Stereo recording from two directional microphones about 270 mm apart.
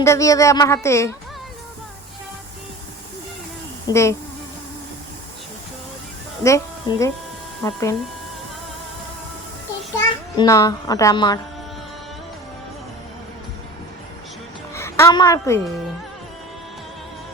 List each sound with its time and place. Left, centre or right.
0.0 s speech: centre
3.8 s speech: centre
6.4 s speech: centre
10.0 s a child's voice: centre
14.8 s a woman's voice: centre